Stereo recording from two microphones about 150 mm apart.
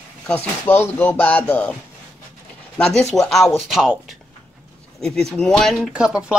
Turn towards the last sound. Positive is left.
turn(degrees=-5)  # may be behind; listen again after turning